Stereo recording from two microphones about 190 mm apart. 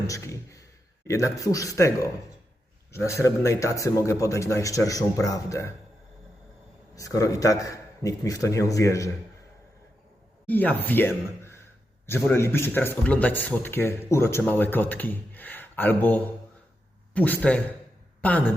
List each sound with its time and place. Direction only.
0.1 s speech: 15° left (ahead or behind)
6.9 s speech: 15° left (ahead or behind)
10.4 s speech: 10° left (ahead or behind)